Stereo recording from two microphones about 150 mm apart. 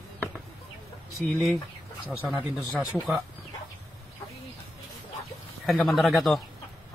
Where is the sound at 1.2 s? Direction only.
Centre (ahead or behind).